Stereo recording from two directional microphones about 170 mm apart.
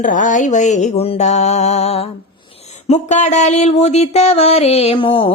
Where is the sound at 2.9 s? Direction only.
45° left (ahead or behind).